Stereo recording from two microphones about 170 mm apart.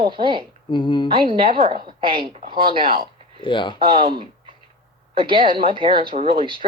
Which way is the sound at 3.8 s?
30° right (ahead or behind).